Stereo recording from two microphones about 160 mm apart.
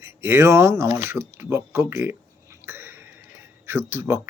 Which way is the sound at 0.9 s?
15° right (ahead or behind).